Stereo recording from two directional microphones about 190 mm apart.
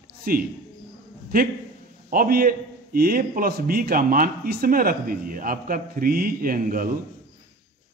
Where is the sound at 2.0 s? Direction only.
50° right (ahead or behind).